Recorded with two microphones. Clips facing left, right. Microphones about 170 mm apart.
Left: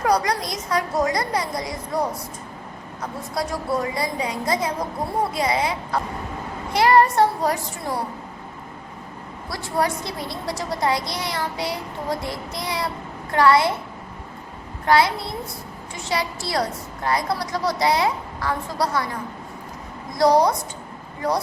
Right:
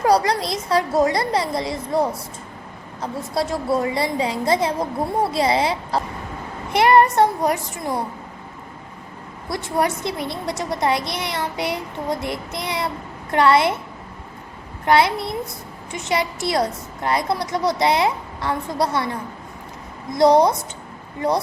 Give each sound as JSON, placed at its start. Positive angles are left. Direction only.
{"t": 0.0, "sound": "a child's voice", "side_deg": -30}
{"t": 9.5, "sound": "a child's voice", "side_deg": -20}
{"t": 14.8, "sound": "a child's voice", "side_deg": -20}
{"t": 20.1, "sound": "a child's voice", "side_deg": -25}